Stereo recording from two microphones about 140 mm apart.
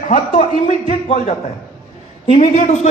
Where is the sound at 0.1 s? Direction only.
60° left (ahead or behind).